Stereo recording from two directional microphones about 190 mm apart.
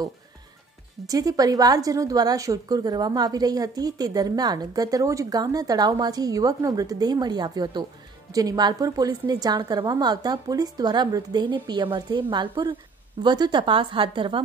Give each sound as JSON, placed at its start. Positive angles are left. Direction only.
{"t": 1.0, "sound": "a woman's voice", "side_deg": -20}